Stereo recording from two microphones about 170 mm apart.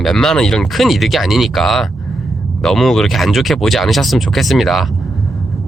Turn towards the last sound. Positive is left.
turn(degrees=0)  # may be behind; listen again after turning